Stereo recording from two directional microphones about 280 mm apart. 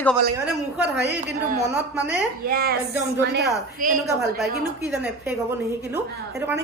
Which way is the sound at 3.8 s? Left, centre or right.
Right.